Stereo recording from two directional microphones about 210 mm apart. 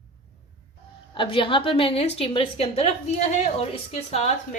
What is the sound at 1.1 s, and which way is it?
A woman's voice, 25° left (ahead or behind).